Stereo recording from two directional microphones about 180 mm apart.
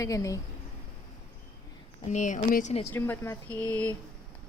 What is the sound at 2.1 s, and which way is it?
Speech, 40° left (ahead or behind).